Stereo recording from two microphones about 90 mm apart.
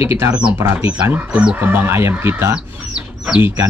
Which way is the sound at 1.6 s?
25° right (ahead or behind).